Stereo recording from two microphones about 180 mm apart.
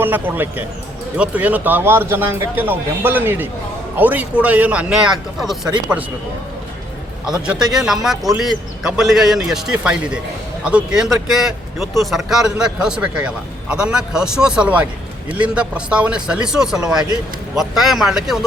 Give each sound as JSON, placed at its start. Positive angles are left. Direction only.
{"t": 0.0, "sound": "a man's voice", "side_deg": -10}
{"t": 7.3, "sound": "speech", "side_deg": -5}